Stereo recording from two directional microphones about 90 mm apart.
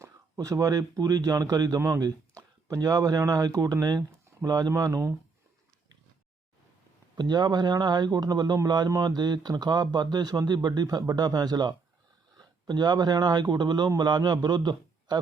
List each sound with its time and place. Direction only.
0.3 s a man's voice: 45° right (ahead or behind)
7.2 s a man's voice: 50° right (ahead or behind)